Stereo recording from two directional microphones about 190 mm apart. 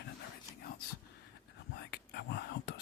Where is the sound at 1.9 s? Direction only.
60° left (ahead or behind).